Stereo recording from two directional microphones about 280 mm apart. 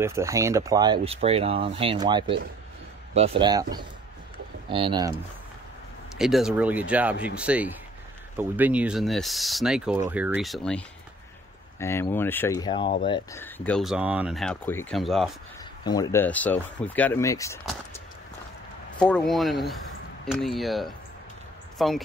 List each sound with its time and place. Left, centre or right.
0.0 s speech: centre
4.6 s speech: centre
6.1 s speech: centre
11.8 s speech: centre
15.8 s speech: centre
18.9 s speech: centre